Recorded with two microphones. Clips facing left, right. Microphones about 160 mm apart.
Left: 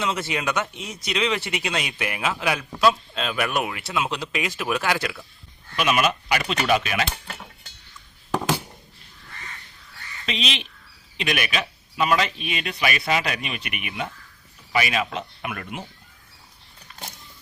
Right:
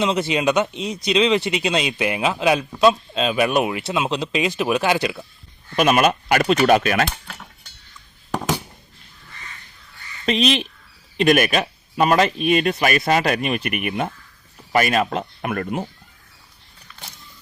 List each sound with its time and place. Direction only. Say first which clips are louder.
0.0 s speech: right 7 dB; 20° right (ahead or behind)
5.7 s speech: right 5 dB; 45° right (ahead or behind)
8.3 s a sound: right 1 dB; 5° right (ahead or behind)
10.2 s speech: right 10 dB; 45° right (ahead or behind)